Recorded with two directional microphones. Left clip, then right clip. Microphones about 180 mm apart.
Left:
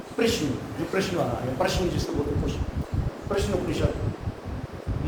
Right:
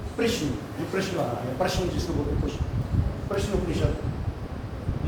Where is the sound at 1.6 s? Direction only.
35° left (ahead or behind).